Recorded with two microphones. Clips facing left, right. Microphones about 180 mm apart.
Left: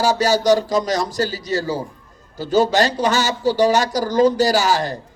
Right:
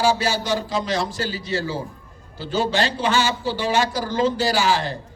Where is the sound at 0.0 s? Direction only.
40° left (ahead or behind).